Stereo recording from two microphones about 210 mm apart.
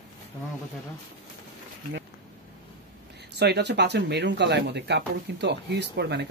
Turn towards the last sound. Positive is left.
turn(degrees=-55)  # may be behind; listen again after turning